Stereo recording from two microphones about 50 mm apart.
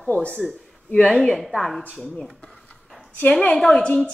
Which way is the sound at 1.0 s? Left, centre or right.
Centre.